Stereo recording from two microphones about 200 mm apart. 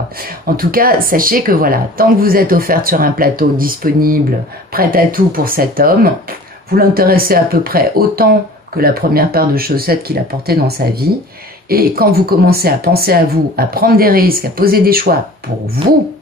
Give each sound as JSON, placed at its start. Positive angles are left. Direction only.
{"t": 0.6, "sound": "speech", "side_deg": -45}